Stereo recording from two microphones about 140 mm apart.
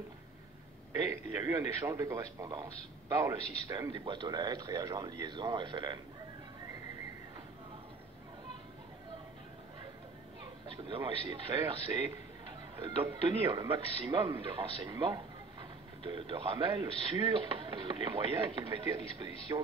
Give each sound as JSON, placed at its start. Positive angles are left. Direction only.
{"t": 1.0, "sound": "a man's voice", "side_deg": -25}
{"t": 10.4, "sound": "chatter", "side_deg": -40}
{"t": 11.6, "sound": "speech", "side_deg": -35}